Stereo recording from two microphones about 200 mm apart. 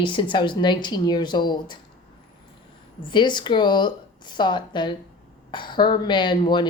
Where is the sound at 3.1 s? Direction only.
25° left (ahead or behind).